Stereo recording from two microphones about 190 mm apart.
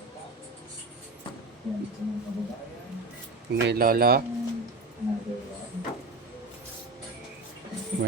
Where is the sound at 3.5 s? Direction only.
55° right (ahead or behind).